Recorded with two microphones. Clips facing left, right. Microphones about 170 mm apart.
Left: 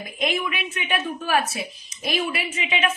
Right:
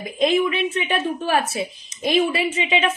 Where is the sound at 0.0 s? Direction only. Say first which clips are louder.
Right 7 dB; 25° right (ahead or behind).